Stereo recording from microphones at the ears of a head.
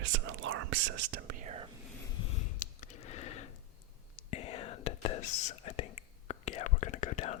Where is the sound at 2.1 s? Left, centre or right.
Left.